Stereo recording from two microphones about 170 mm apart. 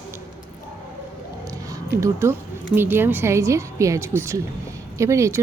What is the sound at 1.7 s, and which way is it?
Speech, 15° right (ahead or behind).